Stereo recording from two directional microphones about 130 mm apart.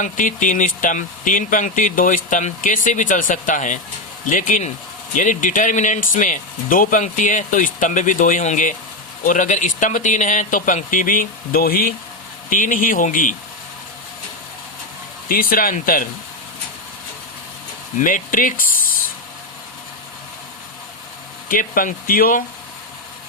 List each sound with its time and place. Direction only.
0.0 s speech: 80° left
15.3 s speech: 90° left
18.0 s speech: 90° left
21.5 s speech: 90° left